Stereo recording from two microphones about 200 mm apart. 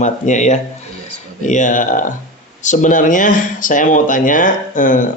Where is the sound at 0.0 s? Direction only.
35° left (ahead or behind).